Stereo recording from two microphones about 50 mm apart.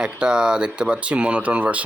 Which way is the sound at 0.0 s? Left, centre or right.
Centre.